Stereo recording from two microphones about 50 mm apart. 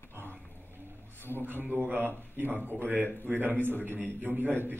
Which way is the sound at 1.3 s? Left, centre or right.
Right.